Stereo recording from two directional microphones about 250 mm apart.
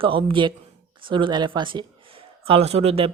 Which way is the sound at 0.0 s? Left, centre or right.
Right.